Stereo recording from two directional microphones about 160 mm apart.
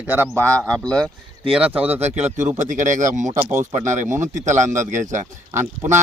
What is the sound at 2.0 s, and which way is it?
Speech, 45° right (ahead or behind).